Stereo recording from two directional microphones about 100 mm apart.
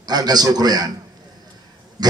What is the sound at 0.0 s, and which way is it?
Speech, 45° right (ahead or behind).